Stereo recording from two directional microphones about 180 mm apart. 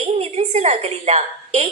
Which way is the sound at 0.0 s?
35° right (ahead or behind).